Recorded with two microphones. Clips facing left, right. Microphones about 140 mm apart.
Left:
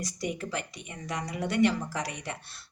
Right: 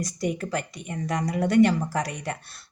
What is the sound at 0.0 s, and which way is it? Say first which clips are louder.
Speech: right 5 dB; 45° right (ahead or behind).